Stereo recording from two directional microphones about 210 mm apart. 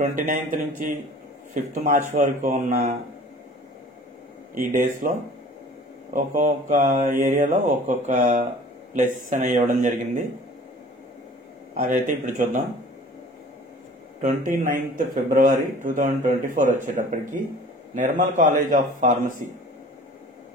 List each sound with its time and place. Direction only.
0.0 s speech: 40° right (ahead or behind)
6.1 s speech: 40° right (ahead or behind)
11.7 s speech: 40° right (ahead or behind)
14.2 s speech: 35° right (ahead or behind)